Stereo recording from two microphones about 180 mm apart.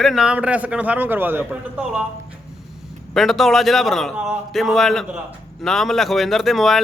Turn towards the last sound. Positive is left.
turn(degrees=0)  # may be behind; listen again after turning